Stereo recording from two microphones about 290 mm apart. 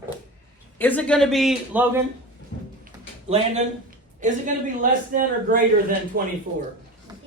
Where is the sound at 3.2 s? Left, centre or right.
Right.